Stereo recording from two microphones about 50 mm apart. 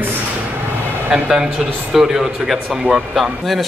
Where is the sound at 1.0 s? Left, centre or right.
Right.